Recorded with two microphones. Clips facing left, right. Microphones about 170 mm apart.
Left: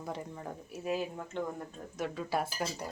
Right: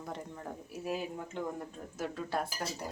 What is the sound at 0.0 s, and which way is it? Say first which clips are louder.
Speech: left 2 dB; 5° left (ahead or behind).